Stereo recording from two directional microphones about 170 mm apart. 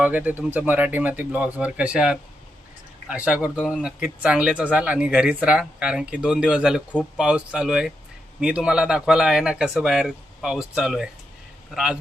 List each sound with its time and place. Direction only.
0.0 s speech: 10° right (ahead or behind)